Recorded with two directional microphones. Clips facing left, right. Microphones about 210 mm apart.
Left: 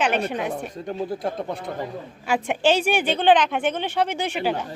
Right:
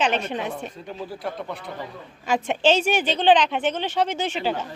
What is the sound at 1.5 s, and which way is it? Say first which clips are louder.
Speech: left 4 dB; 45° left (ahead or behind).